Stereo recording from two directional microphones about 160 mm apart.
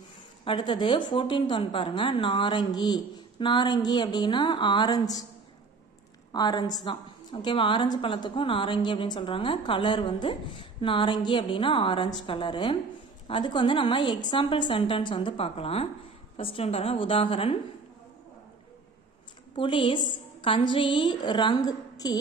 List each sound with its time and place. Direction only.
0.5 s a woman's voice: 30° left (ahead or behind)
6.3 s a woman's voice: 25° left (ahead or behind)
19.5 s a woman's voice: 30° left (ahead or behind)